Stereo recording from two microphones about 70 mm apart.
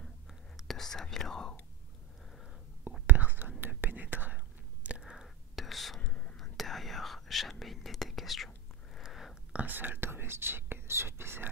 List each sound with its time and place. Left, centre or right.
0.0 s whispering: centre
3.1 s speech: right
3.6 s whispering: right
4.8 s whispering: centre
5.9 s whispering: centre
6.3 s whispering: centre
8.9 s a sound: centre
9.5 s whispering: right